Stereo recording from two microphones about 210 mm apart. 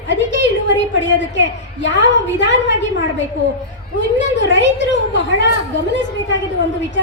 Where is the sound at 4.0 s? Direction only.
60° left (ahead or behind).